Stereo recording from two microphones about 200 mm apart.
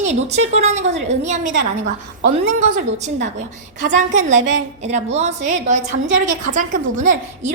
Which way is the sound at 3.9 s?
40° right (ahead or behind).